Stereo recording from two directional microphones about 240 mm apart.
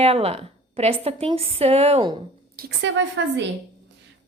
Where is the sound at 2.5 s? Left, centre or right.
Right.